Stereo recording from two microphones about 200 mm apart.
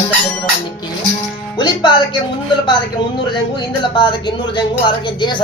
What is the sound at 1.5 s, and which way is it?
Speech, 20° left (ahead or behind).